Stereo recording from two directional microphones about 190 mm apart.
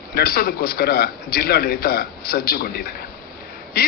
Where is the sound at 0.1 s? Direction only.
55° left (ahead or behind).